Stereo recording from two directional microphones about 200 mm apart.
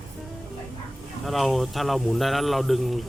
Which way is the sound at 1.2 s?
Centre (ahead or behind).